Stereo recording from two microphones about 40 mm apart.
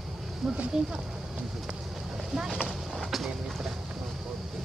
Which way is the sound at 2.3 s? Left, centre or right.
Centre.